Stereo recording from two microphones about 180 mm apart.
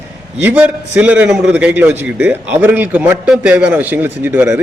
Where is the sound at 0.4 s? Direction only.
10° right (ahead or behind).